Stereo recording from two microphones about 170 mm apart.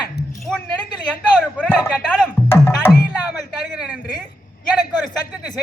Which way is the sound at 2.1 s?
10° left (ahead or behind).